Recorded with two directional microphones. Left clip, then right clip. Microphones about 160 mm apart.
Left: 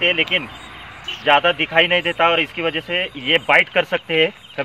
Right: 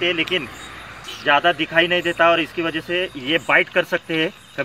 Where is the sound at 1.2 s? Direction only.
55° left (ahead or behind).